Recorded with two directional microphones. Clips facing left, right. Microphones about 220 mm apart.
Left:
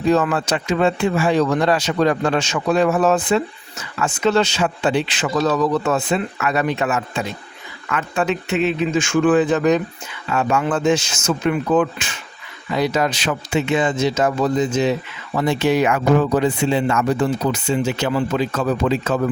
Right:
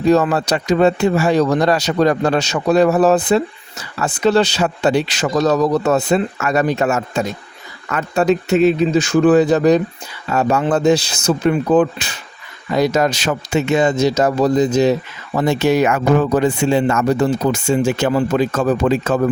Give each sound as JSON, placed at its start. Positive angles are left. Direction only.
{"t": 0.0, "sound": "speech", "side_deg": -35}